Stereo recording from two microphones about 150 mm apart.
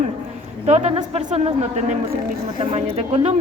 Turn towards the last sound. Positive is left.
turn(degrees=-40)  # may be behind; listen again after turning